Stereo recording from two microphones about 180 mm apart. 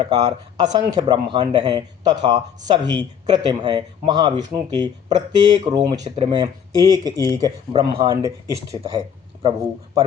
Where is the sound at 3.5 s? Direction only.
25° right (ahead or behind).